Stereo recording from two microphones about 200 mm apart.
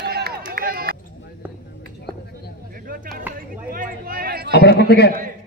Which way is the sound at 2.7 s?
45° right (ahead or behind).